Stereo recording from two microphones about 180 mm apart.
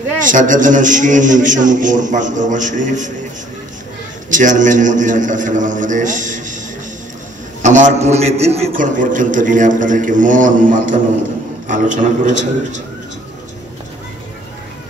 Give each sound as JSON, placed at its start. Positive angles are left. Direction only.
{"t": 0.2, "sound": "a man's voice", "side_deg": -45}
{"t": 4.3, "sound": "a man's voice", "side_deg": -45}
{"t": 7.6, "sound": "a man's voice", "side_deg": -45}